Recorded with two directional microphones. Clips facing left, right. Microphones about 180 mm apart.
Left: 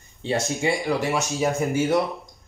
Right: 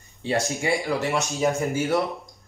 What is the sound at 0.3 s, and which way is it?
Speech, 15° left (ahead or behind).